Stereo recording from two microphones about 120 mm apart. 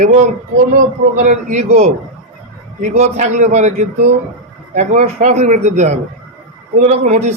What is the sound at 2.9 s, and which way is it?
A man's voice, 70° right (ahead or behind).